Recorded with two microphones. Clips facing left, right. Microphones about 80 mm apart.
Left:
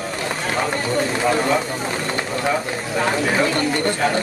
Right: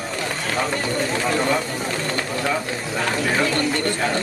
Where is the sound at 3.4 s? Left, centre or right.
Left.